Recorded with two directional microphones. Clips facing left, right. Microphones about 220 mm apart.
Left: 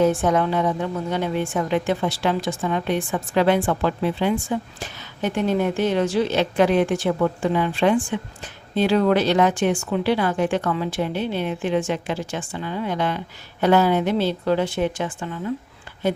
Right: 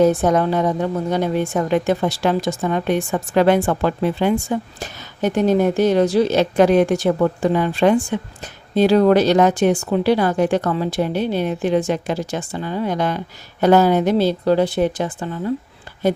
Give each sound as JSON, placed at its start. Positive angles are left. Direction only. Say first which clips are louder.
{"t": 0.0, "sound": "a woman's voice", "louder": "right 4 dB", "side_deg": -40}